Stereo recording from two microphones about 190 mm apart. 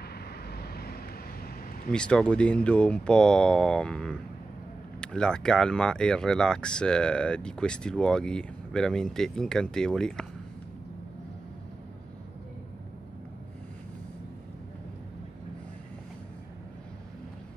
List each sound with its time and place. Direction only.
0.5 s vehicle: 55° left (ahead or behind)
1.9 s speech: 5° left (ahead or behind)